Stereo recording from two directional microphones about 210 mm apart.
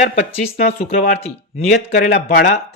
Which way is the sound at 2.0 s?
35° left (ahead or behind).